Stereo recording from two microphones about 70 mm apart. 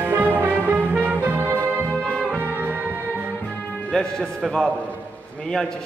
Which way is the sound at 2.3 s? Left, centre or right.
Right.